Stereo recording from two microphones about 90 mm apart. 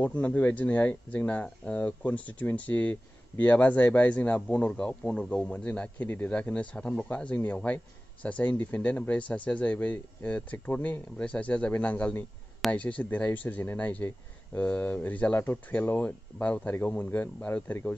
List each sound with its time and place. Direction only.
0.0 s speech: 15° left (ahead or behind)